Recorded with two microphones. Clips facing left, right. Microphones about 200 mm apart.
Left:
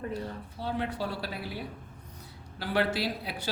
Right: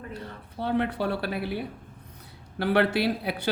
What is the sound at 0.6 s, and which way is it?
Speech, 60° right (ahead or behind).